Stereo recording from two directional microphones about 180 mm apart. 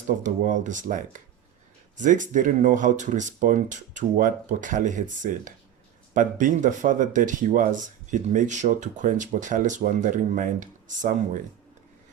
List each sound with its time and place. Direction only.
0.2 s speech: 45° right (ahead or behind)